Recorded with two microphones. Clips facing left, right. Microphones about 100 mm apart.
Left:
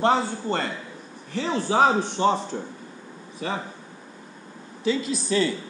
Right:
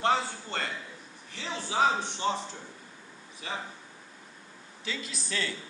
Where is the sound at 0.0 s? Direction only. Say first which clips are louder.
Left 6 dB; 35° left (ahead or behind).